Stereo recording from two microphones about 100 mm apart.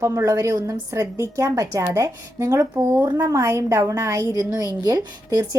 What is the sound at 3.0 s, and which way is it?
A woman's voice, 35° right (ahead or behind).